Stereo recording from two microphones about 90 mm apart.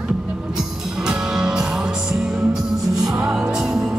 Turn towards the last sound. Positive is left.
turn(degrees=-10)  # may be behind; listen again after turning